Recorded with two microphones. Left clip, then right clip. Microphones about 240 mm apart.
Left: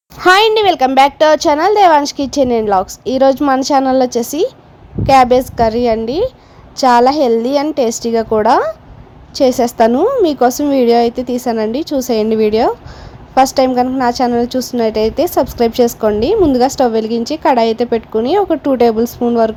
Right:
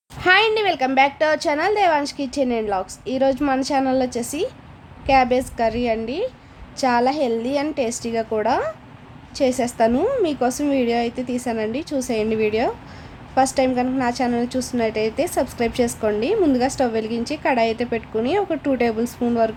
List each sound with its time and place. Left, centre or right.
0.2 s a woman's voice: left